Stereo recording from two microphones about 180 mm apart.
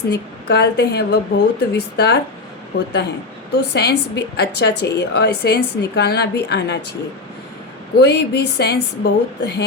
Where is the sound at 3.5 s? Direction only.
65° left (ahead or behind).